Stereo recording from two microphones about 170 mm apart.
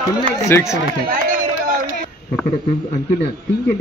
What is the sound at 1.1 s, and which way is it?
Run, 55° right (ahead or behind).